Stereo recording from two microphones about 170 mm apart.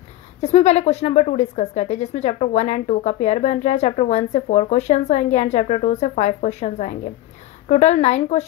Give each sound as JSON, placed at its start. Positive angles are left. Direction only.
{"t": 0.4, "sound": "a woman's voice", "side_deg": 40}